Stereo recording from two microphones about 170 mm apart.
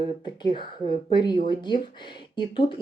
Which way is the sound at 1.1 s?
25° left (ahead or behind).